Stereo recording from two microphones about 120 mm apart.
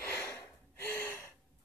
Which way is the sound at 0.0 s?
15° left (ahead or behind).